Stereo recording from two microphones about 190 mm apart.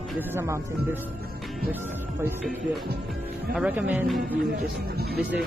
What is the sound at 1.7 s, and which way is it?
Speech, 10° right (ahead or behind).